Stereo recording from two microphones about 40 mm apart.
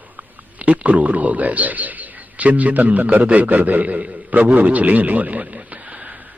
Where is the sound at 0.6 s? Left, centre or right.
Right.